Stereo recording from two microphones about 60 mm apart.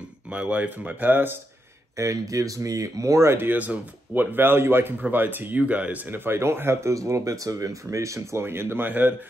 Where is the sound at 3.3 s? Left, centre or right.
Right.